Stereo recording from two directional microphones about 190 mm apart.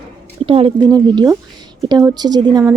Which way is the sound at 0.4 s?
30° right (ahead or behind).